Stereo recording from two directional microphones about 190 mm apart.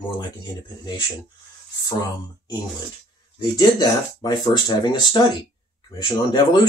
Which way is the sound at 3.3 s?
20° left (ahead or behind).